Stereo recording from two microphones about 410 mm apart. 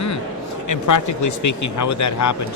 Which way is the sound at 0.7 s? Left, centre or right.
Left.